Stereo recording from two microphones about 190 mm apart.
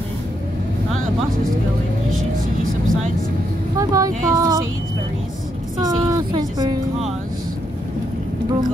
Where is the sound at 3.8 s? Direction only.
15° right (ahead or behind).